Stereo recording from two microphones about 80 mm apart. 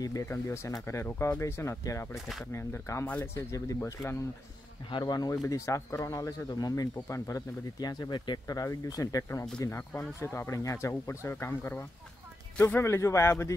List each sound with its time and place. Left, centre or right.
0.0 s speech: left
2.1 s speech: centre
2.5 s speech: left
5.0 s speech: left
5.3 s speech: left
7.8 s speech: left
8.5 s speech: left